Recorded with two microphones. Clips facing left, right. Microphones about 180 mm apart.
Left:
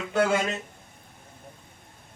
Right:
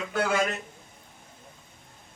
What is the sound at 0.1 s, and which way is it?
Speech, 20° left (ahead or behind).